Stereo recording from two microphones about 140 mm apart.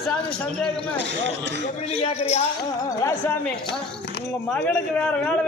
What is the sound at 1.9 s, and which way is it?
Speech, 50° left (ahead or behind).